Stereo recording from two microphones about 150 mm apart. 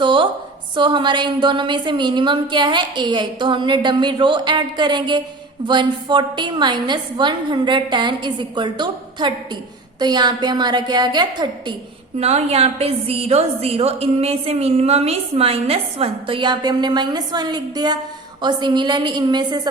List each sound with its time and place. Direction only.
0.0 s a sound: 35° right (ahead or behind)
0.8 s a woman's voice: 30° right (ahead or behind)
12.2 s a woman's voice: 45° right (ahead or behind); by 19.6 s 25° right (ahead or behind)